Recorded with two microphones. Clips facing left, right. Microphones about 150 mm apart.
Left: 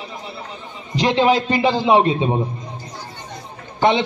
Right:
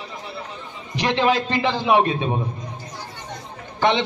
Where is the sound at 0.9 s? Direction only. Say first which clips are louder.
Left 4 dB; 15° left (ahead or behind).